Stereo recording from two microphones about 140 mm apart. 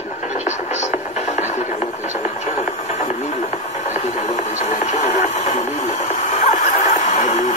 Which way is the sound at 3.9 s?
55° left (ahead or behind).